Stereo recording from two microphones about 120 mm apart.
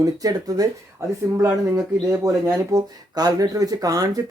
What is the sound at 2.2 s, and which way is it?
Speech, 25° right (ahead or behind).